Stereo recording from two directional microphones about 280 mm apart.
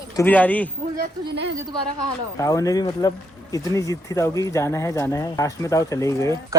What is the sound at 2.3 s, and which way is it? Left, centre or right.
Speech, centre.